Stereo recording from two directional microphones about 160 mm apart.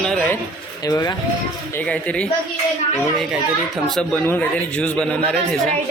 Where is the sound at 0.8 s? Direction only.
25° left (ahead or behind).